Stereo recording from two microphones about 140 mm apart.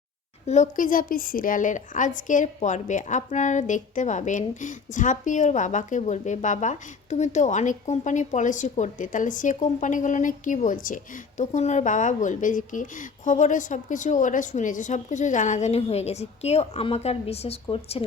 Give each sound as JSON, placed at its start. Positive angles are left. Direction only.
{"t": 0.4, "sound": "a woman's voice", "side_deg": 55}